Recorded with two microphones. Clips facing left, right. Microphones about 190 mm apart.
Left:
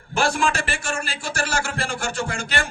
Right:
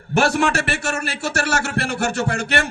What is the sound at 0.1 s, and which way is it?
A man's voice, 65° right (ahead or behind).